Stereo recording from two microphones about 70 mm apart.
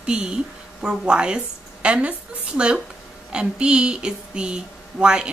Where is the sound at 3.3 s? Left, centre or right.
Centre.